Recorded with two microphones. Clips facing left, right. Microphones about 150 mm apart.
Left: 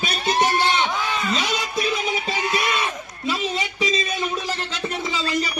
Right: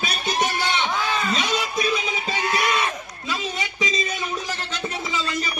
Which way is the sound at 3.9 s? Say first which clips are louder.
Left 2 dB; 30° left (ahead or behind).